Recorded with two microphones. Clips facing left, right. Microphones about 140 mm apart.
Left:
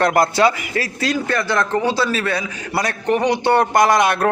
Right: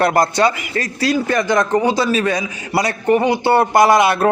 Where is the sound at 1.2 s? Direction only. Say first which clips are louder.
Right 3 dB; 15° right (ahead or behind).